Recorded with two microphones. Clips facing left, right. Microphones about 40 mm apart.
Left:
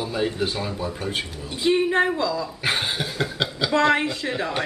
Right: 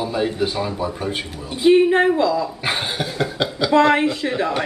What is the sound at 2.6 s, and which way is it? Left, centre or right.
Cough, centre.